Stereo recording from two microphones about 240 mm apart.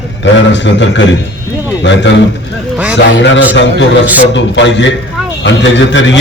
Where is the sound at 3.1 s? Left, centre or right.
Left.